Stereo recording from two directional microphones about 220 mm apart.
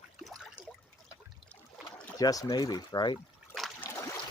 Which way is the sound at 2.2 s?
15° left (ahead or behind).